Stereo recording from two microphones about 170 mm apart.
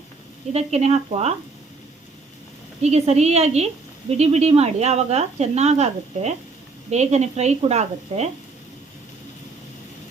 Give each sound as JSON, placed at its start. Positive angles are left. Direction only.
{"t": 0.5, "sound": "speech", "side_deg": -40}
{"t": 2.8, "sound": "speech", "side_deg": -40}